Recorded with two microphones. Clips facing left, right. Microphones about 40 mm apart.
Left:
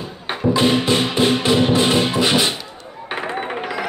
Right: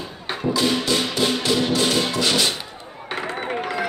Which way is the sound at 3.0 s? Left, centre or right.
Centre.